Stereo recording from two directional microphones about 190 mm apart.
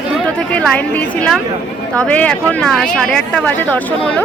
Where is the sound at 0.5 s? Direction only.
5° left (ahead or behind).